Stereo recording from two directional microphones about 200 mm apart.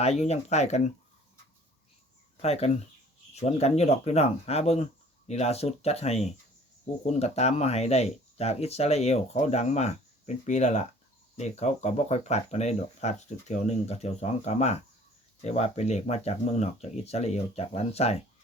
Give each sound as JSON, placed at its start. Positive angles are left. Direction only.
{"t": 0.0, "sound": "speech", "side_deg": 30}
{"t": 2.4, "sound": "speech", "side_deg": 30}